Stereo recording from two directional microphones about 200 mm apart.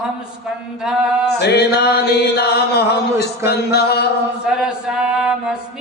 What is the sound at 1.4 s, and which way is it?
Chant, 55° left (ahead or behind).